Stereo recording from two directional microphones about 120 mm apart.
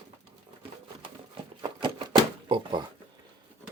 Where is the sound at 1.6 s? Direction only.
45° right (ahead or behind).